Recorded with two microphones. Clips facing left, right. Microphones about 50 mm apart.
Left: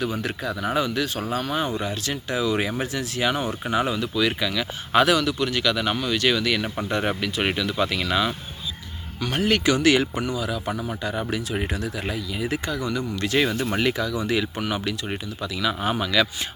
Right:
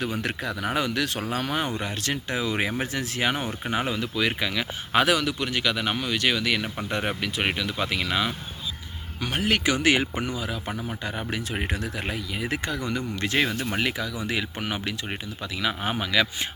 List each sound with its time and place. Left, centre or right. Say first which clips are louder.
0.2 s speech: left 1 dB; right
11.3 s speech: left 2 dB; right
13.6 s speech: left 4 dB; centre